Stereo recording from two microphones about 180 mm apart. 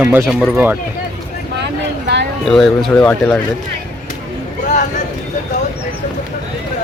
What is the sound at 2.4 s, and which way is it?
Speech, centre (ahead or behind).